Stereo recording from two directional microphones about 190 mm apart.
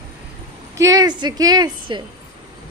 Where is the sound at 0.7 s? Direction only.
15° right (ahead or behind).